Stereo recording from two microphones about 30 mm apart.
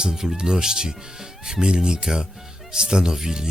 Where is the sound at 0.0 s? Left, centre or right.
Centre.